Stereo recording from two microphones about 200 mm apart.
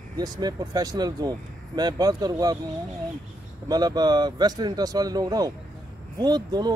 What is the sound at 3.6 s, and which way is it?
Speech, 20° right (ahead or behind).